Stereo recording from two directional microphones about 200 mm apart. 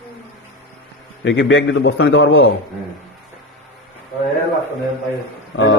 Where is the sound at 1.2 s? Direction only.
60° left (ahead or behind).